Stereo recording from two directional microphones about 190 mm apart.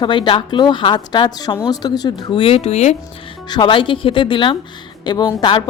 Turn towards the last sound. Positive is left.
turn(degrees=20)  # may be behind; listen again after turning